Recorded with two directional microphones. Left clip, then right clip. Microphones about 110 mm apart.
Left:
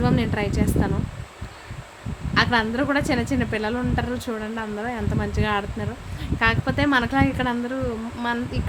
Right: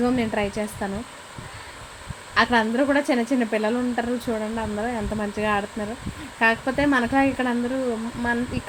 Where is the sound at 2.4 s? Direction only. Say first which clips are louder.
Right 1 dB; 20° right (ahead or behind).